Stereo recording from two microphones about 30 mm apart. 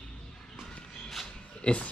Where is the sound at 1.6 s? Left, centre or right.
Left.